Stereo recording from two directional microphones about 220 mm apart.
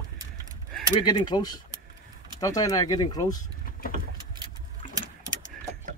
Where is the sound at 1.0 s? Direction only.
20° left (ahead or behind).